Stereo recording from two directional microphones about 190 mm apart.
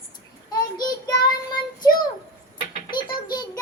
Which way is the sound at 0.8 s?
20° left (ahead or behind).